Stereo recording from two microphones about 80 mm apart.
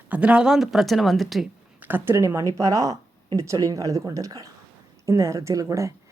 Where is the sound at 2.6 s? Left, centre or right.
Right.